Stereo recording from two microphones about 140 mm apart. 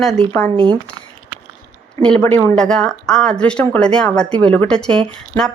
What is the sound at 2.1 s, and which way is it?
Speech, 15° left (ahead or behind).